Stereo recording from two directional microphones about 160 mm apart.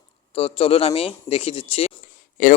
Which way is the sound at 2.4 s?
55° left (ahead or behind).